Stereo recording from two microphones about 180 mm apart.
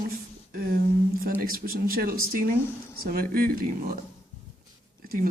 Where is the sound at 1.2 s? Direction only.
50° right (ahead or behind).